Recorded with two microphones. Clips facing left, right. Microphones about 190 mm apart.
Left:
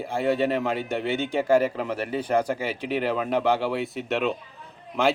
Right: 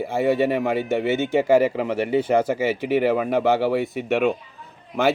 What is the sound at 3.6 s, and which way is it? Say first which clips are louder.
Speech: right 5 dB; 60° right (ahead or behind).